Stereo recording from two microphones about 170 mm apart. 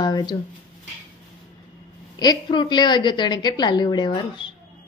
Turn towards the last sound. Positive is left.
turn(degrees=30)  # may be behind; listen again after turning